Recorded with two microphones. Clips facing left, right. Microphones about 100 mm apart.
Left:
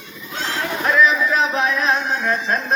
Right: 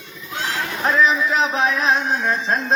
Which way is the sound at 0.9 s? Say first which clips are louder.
Left 1 dB; 25° right (ahead or behind).